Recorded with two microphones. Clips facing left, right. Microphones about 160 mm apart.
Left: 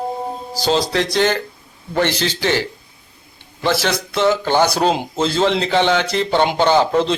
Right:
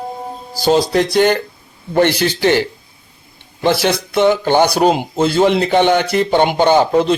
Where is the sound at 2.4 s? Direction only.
55° right (ahead or behind).